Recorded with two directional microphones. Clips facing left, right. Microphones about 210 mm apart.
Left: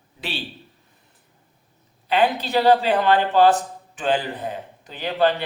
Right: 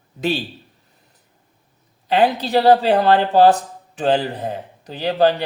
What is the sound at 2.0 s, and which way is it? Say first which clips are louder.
Speech: right 3 dB; 40° right (ahead or behind).